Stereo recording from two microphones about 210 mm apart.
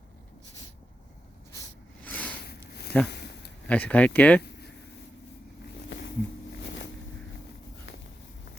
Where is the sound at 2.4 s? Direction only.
50° left (ahead or behind).